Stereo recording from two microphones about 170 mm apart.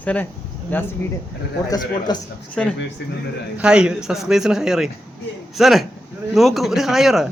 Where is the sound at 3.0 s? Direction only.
80° left.